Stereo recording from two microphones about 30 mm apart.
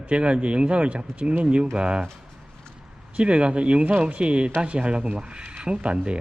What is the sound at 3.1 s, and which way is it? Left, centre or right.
Speech, right.